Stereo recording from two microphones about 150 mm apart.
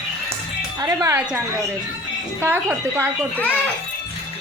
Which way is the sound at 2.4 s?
15° right (ahead or behind).